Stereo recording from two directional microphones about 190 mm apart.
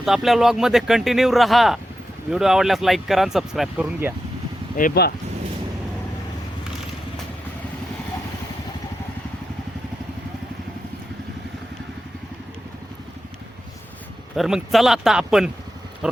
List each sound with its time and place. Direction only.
0.0 s speech: centre (ahead or behind)
4.8 s speech: 50° left (ahead or behind)
14.3 s speech: centre (ahead or behind)